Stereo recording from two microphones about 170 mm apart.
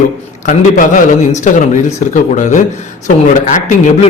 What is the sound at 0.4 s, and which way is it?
A man's voice, 50° left (ahead or behind).